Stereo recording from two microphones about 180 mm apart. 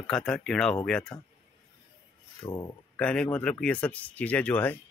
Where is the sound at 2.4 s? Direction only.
25° left (ahead or behind).